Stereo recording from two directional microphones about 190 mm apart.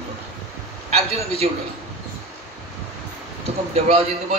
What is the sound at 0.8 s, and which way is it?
Speech, 35° right (ahead or behind).